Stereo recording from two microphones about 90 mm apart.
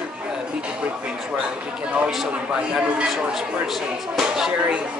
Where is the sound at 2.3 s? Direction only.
15° right (ahead or behind).